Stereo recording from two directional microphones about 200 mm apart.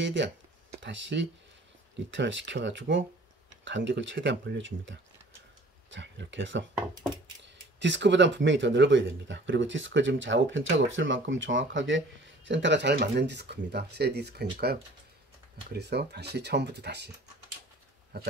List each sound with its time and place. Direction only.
0.0 s speech: 65° right (ahead or behind)
15.8 s speech: 55° right (ahead or behind)
18.1 s speech: 55° right (ahead or behind)